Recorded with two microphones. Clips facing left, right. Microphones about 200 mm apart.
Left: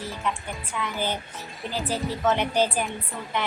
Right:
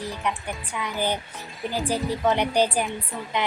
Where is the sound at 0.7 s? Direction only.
15° right (ahead or behind).